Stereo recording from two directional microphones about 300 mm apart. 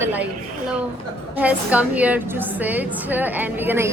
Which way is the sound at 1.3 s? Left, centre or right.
Centre.